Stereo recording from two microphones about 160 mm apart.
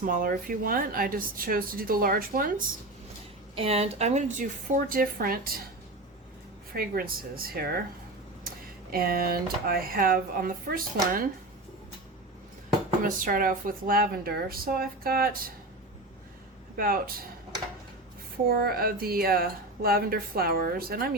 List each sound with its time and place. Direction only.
0.0 s speech: 60° right (ahead or behind)
3.5 s speech: 40° right (ahead or behind); by 5.5 s 65° right (ahead or behind)
6.7 s speech: 65° right (ahead or behind)
13.0 s speech: 60° right (ahead or behind)
16.7 s speech: 65° right (ahead or behind)
18.4 s speech: 70° right (ahead or behind)